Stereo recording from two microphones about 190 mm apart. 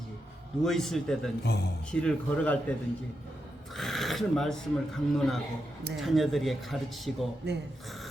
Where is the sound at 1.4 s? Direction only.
60° left (ahead or behind).